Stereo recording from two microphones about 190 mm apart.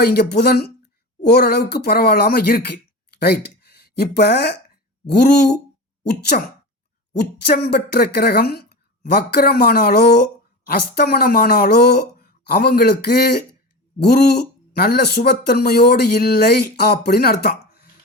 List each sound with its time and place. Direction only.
0.0 s speech: 55° left (ahead or behind)